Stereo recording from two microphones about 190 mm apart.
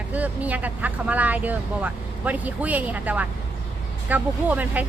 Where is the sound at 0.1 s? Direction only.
10° right (ahead or behind).